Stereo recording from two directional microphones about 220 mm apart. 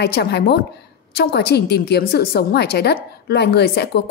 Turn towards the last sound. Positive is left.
turn(degrees=45)  # may be behind; listen again after turning